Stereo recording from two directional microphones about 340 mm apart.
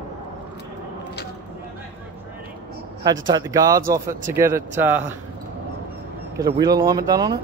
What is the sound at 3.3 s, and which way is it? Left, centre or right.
Speech, centre.